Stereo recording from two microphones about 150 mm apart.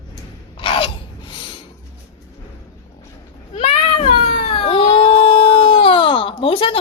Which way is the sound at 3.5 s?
40° left (ahead or behind).